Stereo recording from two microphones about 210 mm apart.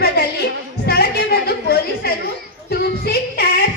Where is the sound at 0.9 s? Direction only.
50° left (ahead or behind).